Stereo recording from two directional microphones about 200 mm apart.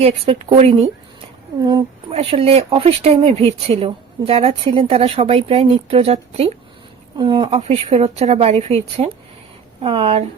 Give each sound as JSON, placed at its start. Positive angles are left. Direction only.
{"t": 0.0, "sound": "speech", "side_deg": -30}